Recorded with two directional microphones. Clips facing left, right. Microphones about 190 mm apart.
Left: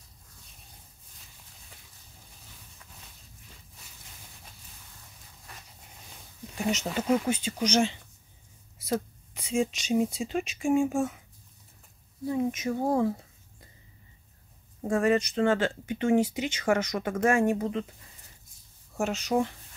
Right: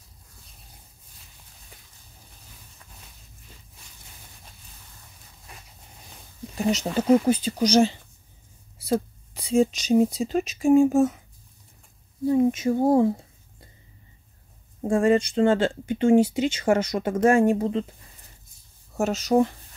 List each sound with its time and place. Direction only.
6.7 s speech: 35° right (ahead or behind)
12.3 s speech: 30° right (ahead or behind)
14.8 s speech: 30° right (ahead or behind)
18.9 s speech: 40° right (ahead or behind)